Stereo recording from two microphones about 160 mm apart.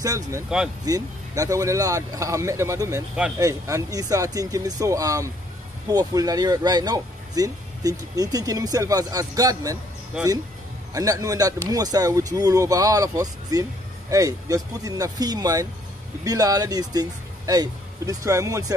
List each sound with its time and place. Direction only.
0.0 s speech: 20° right (ahead or behind)
10.9 s speech: 20° right (ahead or behind)